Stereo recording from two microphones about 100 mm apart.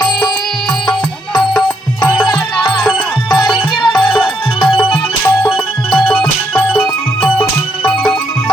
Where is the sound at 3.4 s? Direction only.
55° left (ahead or behind).